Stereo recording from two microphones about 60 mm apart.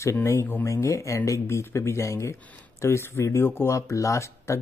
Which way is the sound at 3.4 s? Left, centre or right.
Left.